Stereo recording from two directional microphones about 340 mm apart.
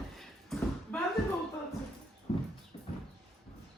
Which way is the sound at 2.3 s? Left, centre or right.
Centre.